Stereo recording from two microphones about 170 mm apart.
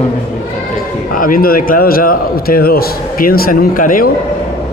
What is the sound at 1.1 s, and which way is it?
A man's voice, 55° left (ahead or behind).